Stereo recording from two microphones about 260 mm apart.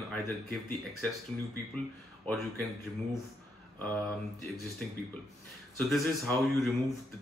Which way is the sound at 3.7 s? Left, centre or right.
Centre.